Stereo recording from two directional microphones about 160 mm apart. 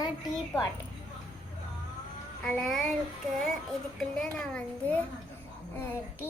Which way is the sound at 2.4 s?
5° left (ahead or behind).